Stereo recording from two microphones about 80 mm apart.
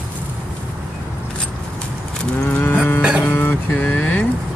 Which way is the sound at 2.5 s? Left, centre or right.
Left.